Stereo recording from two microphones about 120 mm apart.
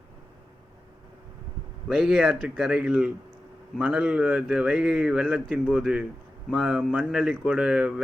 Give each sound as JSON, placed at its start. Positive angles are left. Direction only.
{"t": 1.9, "sound": "speech", "side_deg": -5}